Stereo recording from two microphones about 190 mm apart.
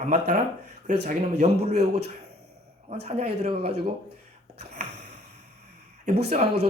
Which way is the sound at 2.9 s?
35° right (ahead or behind).